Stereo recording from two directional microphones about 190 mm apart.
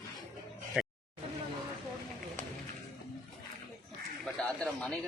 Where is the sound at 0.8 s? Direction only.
5° right (ahead or behind).